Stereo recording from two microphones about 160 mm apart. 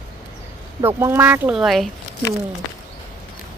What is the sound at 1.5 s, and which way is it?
Speech, centre (ahead or behind).